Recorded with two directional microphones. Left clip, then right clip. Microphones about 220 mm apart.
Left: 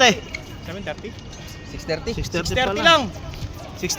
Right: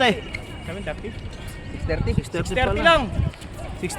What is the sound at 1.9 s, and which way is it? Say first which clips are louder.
Speech: left 1 dB; 50° left (ahead or behind).